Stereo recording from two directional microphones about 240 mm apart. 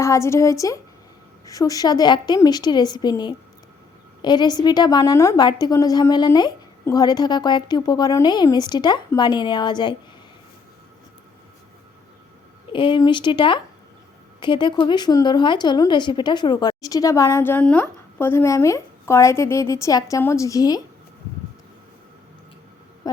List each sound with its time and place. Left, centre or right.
0.0 s a woman's voice: centre
12.7 s a woman's voice: centre